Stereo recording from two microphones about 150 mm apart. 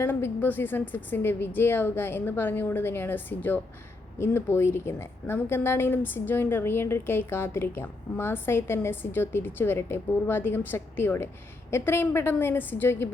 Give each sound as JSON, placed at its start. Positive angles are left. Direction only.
{"t": 0.0, "sound": "a woman's voice", "side_deg": 15}